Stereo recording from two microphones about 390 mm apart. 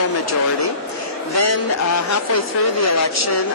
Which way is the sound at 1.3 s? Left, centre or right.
Left.